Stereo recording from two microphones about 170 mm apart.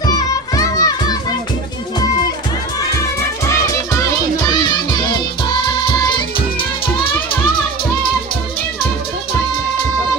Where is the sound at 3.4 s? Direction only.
15° left (ahead or behind).